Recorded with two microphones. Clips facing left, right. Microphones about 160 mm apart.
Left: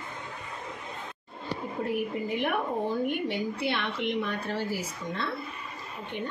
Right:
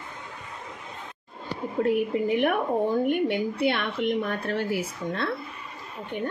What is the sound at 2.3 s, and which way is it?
Speech, 65° right (ahead or behind).